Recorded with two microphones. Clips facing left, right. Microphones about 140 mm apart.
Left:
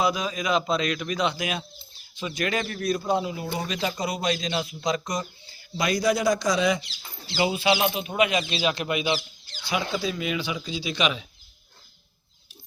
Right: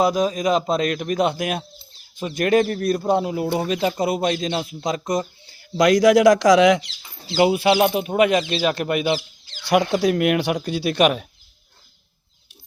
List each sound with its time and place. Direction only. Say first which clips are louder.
0.0 s a man's voice: right 7 dB; 45° right (ahead or behind)
5.7 s speech: right 10 dB; 90° right
7.3 s a man's voice: right 7 dB; 60° right (ahead or behind)
9.6 s speech: right 10 dB; 75° right (ahead or behind); by 11.3 s 55° right (ahead or behind)